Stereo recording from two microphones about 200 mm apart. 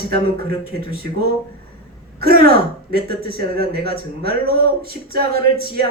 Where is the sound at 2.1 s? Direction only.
50° right (ahead or behind).